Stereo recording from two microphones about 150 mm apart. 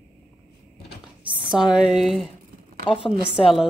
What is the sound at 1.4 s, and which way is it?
Speech, 5° right (ahead or behind).